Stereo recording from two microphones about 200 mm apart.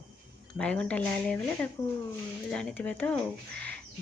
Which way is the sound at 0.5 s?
5° left (ahead or behind).